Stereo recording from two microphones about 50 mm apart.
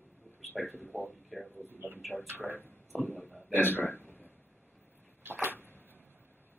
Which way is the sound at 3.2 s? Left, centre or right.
Left.